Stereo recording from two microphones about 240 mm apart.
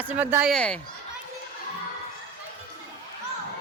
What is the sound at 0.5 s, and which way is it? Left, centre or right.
Speech, centre.